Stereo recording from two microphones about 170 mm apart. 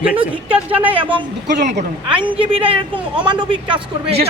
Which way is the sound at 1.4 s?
90° right.